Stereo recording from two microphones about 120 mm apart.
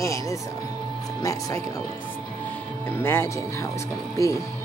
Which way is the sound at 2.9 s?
20° left (ahead or behind).